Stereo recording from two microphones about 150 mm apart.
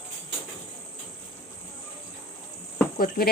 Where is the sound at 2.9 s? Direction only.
85° left.